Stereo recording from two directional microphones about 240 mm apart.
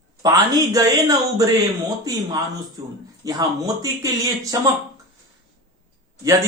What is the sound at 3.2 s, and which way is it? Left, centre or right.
Speech, centre.